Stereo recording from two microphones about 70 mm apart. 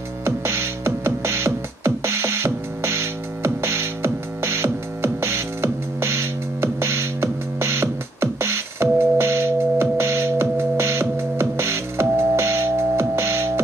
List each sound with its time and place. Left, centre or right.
0.2 s music: right